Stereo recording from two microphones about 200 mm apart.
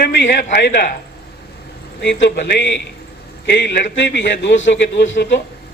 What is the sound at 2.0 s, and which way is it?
A man's voice, 60° left (ahead or behind).